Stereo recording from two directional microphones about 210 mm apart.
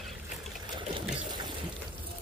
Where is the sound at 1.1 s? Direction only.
20° right (ahead or behind).